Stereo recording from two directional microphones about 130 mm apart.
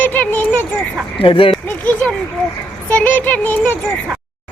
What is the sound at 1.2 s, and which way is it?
Speech, 40° left (ahead or behind).